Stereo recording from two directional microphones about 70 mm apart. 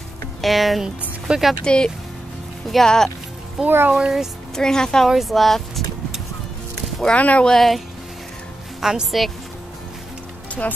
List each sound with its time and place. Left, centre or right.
0.4 s speech: centre
1.6 s a woman's voice: centre
3.6 s speech: right
3.9 s speech: centre
4.6 s a woman's voice: centre
7.2 s speech: left
7.4 s speech: centre
8.8 s speech: centre